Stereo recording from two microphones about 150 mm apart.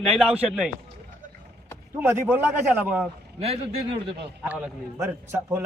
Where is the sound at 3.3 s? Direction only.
40° right (ahead or behind).